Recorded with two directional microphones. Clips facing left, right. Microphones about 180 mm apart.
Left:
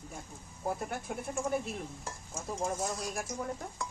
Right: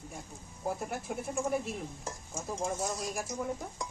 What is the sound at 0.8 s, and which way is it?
Speech, centre (ahead or behind).